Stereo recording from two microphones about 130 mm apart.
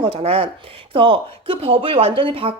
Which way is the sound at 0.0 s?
45° right (ahead or behind).